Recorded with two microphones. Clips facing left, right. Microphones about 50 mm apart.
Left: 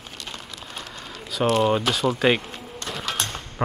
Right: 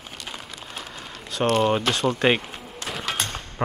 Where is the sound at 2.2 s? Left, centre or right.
Centre.